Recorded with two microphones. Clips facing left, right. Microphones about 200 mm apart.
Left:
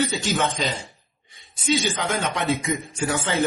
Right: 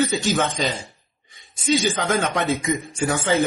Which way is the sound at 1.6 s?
45° right (ahead or behind).